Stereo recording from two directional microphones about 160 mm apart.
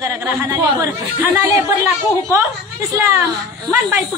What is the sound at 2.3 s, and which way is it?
Speech, 20° right (ahead or behind).